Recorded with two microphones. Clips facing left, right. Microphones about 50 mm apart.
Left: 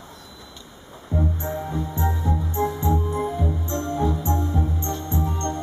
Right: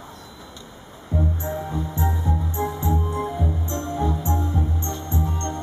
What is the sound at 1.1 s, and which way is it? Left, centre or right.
Music, centre.